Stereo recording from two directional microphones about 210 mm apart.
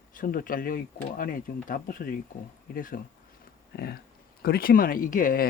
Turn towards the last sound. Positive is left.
turn(degrees=40)  # may be behind; listen again after turning